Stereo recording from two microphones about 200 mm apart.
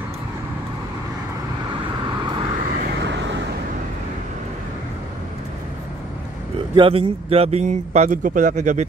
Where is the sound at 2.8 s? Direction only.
60° right (ahead or behind).